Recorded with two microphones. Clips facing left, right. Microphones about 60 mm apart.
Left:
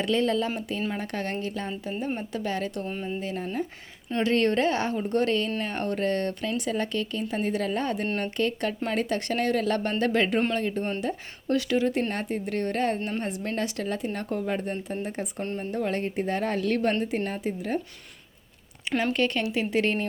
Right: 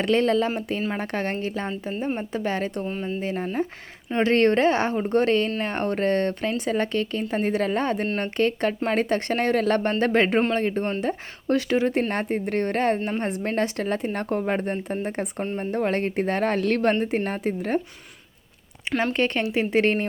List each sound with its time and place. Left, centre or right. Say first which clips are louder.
0.0 s speech: right 4 dB; right
2.8 s speech: right 3 dB; centre
3.2 s speech: right 6 dB; right
17.0 s speech: right 4 dB; right
19.1 s speech: right 3 dB; right